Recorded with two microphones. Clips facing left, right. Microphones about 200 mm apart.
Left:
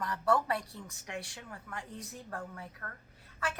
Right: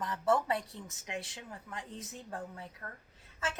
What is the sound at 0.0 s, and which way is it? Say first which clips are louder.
A woman's voice: even; 20° right (ahead or behind).